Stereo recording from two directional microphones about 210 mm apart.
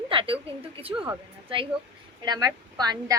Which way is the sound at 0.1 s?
25° right (ahead or behind).